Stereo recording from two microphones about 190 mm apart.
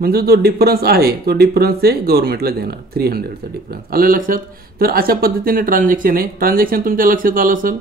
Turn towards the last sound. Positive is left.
turn(degrees=-45)  # may be behind; listen again after turning